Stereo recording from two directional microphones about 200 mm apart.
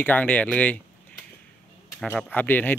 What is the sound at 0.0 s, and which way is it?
Speech, 10° left (ahead or behind).